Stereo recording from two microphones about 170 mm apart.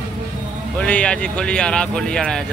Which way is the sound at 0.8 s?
5° left (ahead or behind).